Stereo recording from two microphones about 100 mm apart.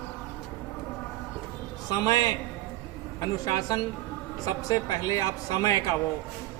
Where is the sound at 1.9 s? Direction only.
40° left (ahead or behind).